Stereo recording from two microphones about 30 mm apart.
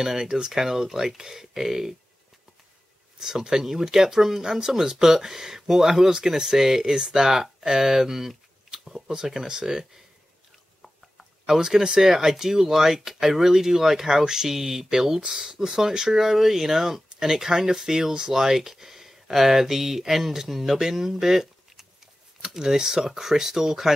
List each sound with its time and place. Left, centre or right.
0.0 s speech: centre
3.2 s speech: right
7.2 s speech: centre
8.3 s a sound: centre
9.2 s speech: centre
11.4 s speech: centre